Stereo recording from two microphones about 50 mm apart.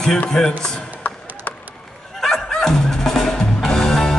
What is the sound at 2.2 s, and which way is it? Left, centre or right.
Music, centre.